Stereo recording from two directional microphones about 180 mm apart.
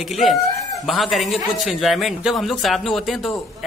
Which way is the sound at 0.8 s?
Centre (ahead or behind).